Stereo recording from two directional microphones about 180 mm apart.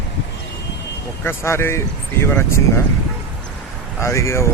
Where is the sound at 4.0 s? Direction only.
15° left (ahead or behind).